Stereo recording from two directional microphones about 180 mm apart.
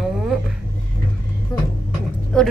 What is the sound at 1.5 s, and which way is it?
Speech, 20° left (ahead or behind).